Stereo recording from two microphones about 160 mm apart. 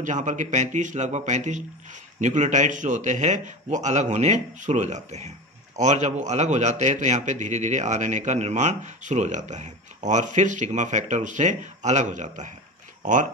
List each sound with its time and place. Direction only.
0.0 s a man's voice: 50° right (ahead or behind)